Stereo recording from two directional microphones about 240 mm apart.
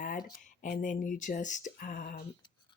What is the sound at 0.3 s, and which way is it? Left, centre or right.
Speech, left.